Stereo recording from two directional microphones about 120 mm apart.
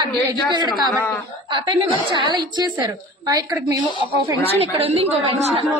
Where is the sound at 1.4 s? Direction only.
40° right (ahead or behind).